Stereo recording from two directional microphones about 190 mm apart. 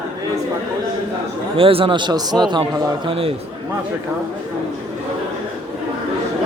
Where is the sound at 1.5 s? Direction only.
30° right (ahead or behind).